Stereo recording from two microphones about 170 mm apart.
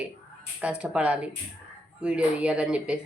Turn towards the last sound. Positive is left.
turn(degrees=-5)  # may be behind; listen again after turning